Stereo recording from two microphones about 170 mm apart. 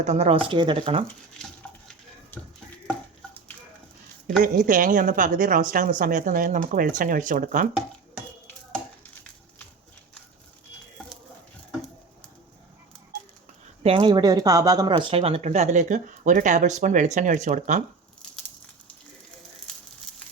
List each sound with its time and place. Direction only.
0.0 s speech: 40° right (ahead or behind)
1.6 s a sound: 5° left (ahead or behind)
4.3 s speech: 55° right (ahead or behind)
13.8 s speech: 30° right (ahead or behind); by 17.8 s 45° right (ahead or behind)